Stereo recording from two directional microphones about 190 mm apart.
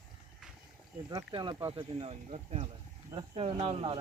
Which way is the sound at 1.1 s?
20° right (ahead or behind).